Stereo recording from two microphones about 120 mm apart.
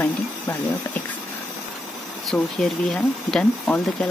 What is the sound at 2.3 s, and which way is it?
Speech, centre (ahead or behind).